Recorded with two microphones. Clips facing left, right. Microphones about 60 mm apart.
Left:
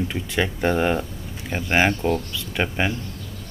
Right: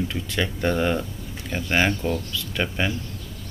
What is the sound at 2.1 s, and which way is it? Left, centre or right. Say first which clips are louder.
Speech: left 3 dB; left.